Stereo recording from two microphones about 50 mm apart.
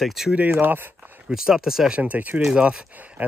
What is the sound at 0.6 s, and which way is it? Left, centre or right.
Speech, right.